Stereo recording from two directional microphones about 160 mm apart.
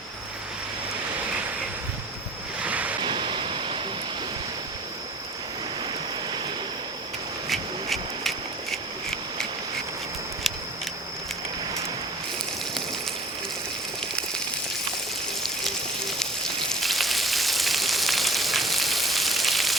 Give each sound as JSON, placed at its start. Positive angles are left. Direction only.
{"t": 2.6, "sound": "waves", "side_deg": -10}
{"t": 3.0, "sound": "waves", "side_deg": -30}
{"t": 7.5, "sound": "a sound", "side_deg": 0}
{"t": 15.4, "sound": "frying", "side_deg": 0}